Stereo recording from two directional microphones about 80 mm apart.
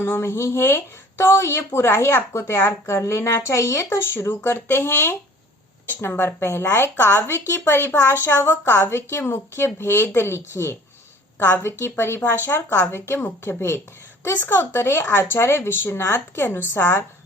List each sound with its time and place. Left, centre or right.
0.0 s a woman's voice: left